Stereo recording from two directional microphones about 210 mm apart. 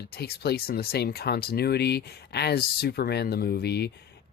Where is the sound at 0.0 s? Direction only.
50° left (ahead or behind).